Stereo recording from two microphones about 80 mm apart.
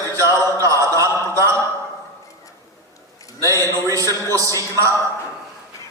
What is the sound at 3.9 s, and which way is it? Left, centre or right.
A man's voice, right.